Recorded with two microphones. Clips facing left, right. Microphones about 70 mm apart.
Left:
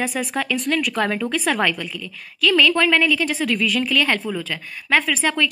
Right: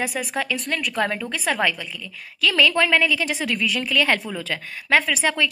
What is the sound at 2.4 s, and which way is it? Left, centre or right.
A woman's voice, centre.